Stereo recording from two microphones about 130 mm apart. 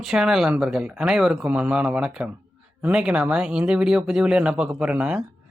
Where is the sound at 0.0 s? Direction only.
5° right (ahead or behind).